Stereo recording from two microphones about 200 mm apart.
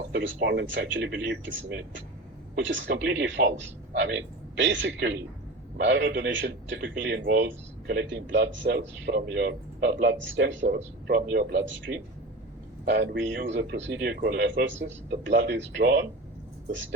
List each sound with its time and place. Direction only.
0.1 s speech: 60° right (ahead or behind)